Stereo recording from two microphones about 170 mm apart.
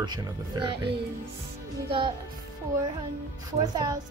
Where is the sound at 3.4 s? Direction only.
20° right (ahead or behind).